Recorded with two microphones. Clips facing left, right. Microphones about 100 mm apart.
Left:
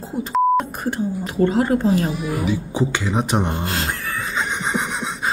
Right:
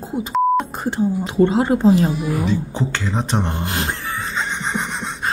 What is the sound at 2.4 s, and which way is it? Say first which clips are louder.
Speech: even; 10° left (ahead or behind).